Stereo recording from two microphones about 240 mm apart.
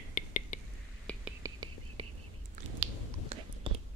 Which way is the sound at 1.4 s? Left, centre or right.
Centre.